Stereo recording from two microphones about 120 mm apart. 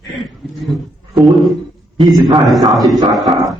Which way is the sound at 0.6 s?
Centre (ahead or behind).